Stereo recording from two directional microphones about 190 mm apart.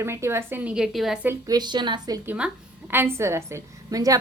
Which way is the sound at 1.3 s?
20° right (ahead or behind).